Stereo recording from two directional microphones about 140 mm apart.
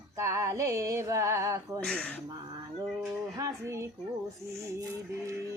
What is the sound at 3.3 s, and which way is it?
Speech, 20° right (ahead or behind).